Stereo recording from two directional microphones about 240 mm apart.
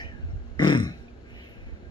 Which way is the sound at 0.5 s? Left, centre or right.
Centre.